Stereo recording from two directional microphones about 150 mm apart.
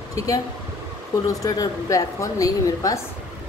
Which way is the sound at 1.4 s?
25° left (ahead or behind).